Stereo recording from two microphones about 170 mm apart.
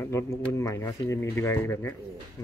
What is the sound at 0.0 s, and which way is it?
Speech, 15° left (ahead or behind).